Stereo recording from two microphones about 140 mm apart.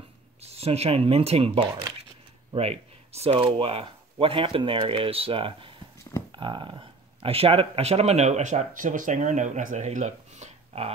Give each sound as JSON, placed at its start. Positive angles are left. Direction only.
{"t": 0.4, "sound": "speech", "side_deg": -50}